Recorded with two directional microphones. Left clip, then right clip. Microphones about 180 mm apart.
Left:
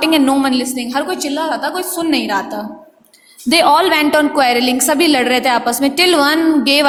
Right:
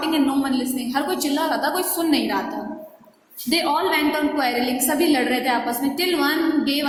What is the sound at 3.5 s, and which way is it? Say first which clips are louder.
A woman's voice: left 9 dB; 60° left (ahead or behind).